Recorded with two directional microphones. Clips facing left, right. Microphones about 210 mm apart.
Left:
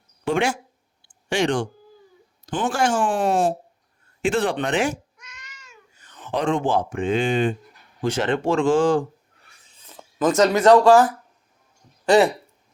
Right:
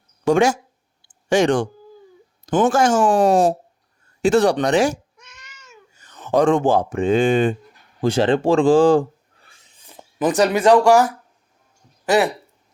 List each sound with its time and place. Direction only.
0.3 s speech: 45° right (ahead or behind)
2.6 s speech: 45° right (ahead or behind)
6.1 s speech: 40° right (ahead or behind)
8.0 s speech: 35° right (ahead or behind)
9.6 s speech: 15° right (ahead or behind)